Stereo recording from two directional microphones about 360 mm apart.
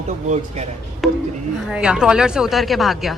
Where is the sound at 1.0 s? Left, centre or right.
Centre.